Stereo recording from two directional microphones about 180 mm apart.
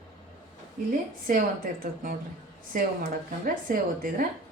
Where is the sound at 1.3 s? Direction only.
50° right (ahead or behind).